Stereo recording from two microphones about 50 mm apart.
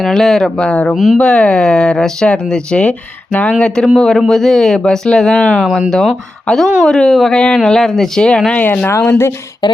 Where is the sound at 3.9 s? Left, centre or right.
Centre.